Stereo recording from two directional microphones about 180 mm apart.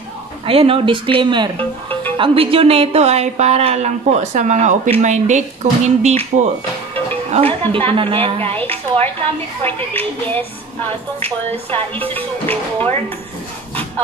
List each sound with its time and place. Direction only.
0.5 s speech: 30° right (ahead or behind)
1.6 s speech: 10° left (ahead or behind)
2.1 s speech: 30° right (ahead or behind)
8.5 s speech: 10° left (ahead or behind)
12.0 s speech: 10° left (ahead or behind)